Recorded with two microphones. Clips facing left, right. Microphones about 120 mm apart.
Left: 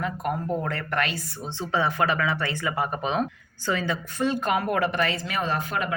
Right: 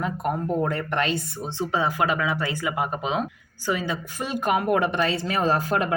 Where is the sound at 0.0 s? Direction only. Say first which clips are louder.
Right 2 dB; 25° right (ahead or behind).